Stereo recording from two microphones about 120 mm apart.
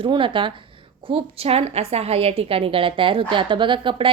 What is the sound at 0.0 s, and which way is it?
A woman's voice, 45° right (ahead or behind).